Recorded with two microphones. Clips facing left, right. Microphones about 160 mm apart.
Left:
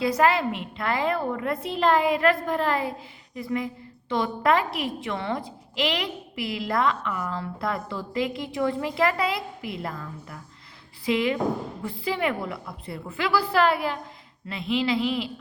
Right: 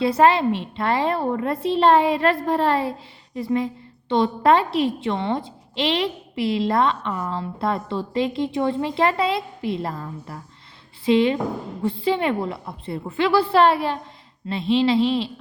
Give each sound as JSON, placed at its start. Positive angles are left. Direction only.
{"t": 0.0, "sound": "a woman's voice", "side_deg": -30}